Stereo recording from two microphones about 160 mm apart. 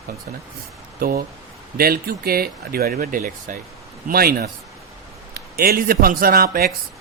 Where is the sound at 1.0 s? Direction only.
70° right (ahead or behind).